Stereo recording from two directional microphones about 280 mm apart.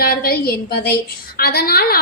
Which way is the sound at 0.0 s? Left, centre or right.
Left.